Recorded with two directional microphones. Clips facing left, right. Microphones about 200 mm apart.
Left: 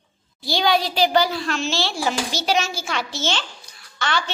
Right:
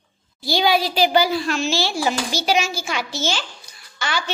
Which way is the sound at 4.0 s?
5° right (ahead or behind).